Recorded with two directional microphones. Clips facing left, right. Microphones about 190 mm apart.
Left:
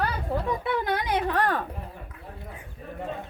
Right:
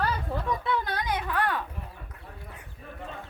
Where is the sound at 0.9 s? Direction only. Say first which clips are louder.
Left 4 dB; 25° left (ahead or behind).